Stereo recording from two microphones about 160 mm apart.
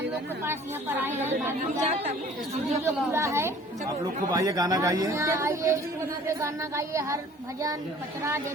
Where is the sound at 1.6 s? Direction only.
45° right (ahead or behind).